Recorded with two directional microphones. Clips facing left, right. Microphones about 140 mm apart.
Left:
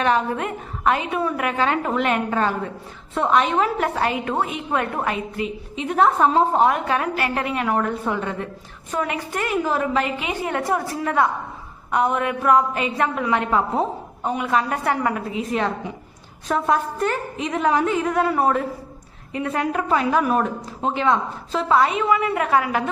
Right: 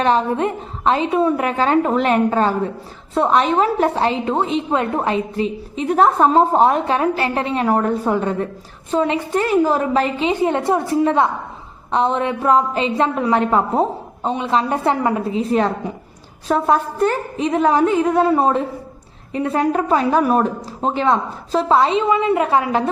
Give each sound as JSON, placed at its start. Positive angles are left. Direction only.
{"t": 0.0, "sound": "a woman's voice", "side_deg": -30}
{"t": 8.9, "sound": "a woman's voice", "side_deg": -25}